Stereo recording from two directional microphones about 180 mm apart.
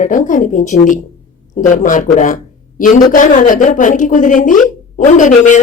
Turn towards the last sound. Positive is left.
turn(degrees=45)  # may be behind; listen again after turning